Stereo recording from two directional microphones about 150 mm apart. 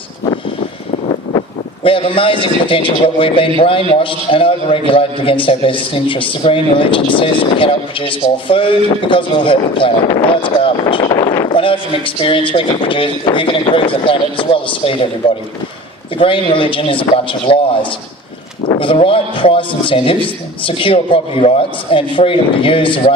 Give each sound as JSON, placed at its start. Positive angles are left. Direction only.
{"t": 1.8, "sound": "a man's voice", "side_deg": 35}
{"t": 16.1, "sound": "a man's voice", "side_deg": 35}
{"t": 18.7, "sound": "a man's voice", "side_deg": 35}